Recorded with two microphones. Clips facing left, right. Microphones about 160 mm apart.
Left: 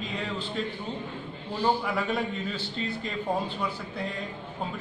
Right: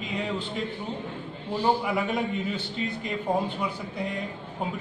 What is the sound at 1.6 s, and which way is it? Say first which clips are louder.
A man's voice: right 1 dB; 15° right (ahead or behind).